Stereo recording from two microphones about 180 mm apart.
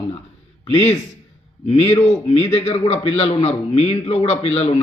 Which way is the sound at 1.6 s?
35° left (ahead or behind).